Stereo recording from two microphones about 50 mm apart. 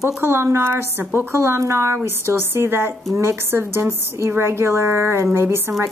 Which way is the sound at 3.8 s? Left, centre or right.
Right.